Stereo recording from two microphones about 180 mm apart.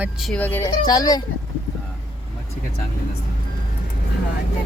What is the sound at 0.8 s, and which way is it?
Speech, 20° left (ahead or behind).